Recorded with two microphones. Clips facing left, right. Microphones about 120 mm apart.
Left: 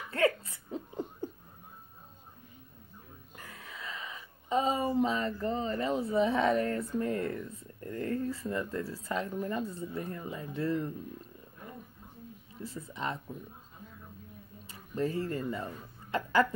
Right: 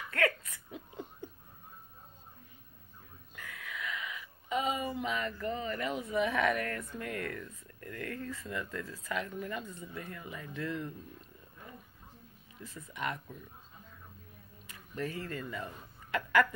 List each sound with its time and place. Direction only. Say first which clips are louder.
0.1 s hiccup: left 4 dB; 30° left (ahead or behind)
3.3 s speech: right 3 dB; 30° left (ahead or behind)
12.6 s speech: left 2 dB; 30° left (ahead or behind)
14.7 s speech: left 6 dB; 30° left (ahead or behind)